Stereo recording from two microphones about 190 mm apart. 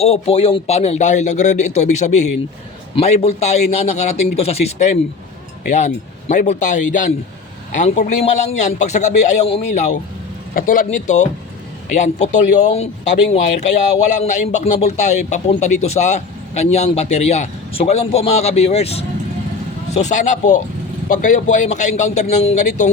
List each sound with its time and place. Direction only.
0.0 s speech: 30° left (ahead or behind)